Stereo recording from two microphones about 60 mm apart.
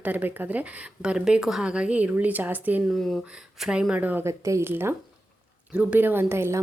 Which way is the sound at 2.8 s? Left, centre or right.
Centre.